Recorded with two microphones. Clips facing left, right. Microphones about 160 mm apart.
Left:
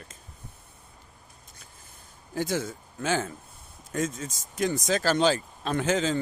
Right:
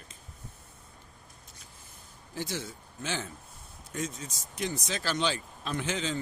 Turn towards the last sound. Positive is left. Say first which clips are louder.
# left 7 dB
turn(degrees=45)  # may be behind; listen again after turning